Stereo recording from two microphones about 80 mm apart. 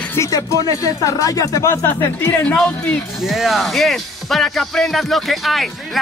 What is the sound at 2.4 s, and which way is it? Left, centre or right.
Speech, centre.